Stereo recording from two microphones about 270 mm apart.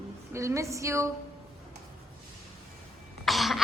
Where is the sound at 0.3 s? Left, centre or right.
Centre.